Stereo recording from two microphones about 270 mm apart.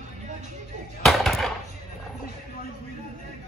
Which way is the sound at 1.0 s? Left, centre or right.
Centre.